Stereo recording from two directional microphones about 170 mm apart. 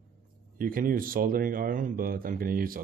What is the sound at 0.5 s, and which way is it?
Speech, 55° right (ahead or behind).